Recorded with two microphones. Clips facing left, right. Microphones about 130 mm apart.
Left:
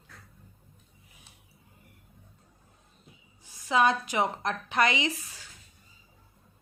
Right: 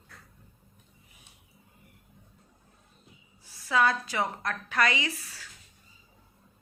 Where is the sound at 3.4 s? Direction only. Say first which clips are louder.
Left 1 dB; 20° left (ahead or behind).